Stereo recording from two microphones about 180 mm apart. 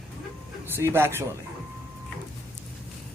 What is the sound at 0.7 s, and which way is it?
Speech, 15° right (ahead or behind).